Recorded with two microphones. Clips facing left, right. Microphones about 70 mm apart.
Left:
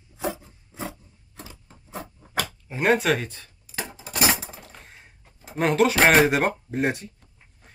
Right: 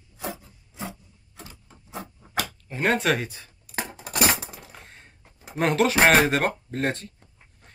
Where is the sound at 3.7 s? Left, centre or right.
Right.